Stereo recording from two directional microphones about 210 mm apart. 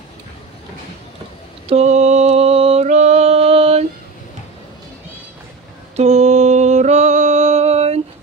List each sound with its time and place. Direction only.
1.7 s mantra: 30° right (ahead or behind)
5.9 s mantra: 30° right (ahead or behind)